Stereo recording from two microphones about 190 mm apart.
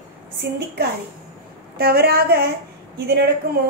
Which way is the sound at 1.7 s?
55° right (ahead or behind).